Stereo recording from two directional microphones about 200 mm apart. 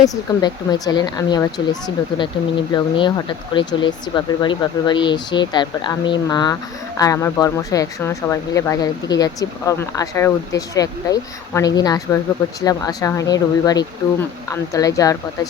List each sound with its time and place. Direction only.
0.0 s speech: 20° left (ahead or behind)